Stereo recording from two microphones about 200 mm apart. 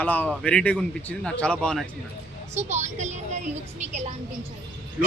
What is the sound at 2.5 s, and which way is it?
Speech, 35° right (ahead or behind).